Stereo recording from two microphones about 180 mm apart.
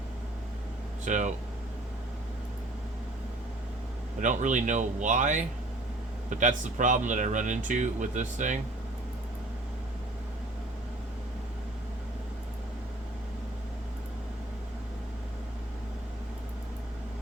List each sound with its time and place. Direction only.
1.0 s speech: 45° right (ahead or behind)
4.2 s speech: 45° right (ahead or behind)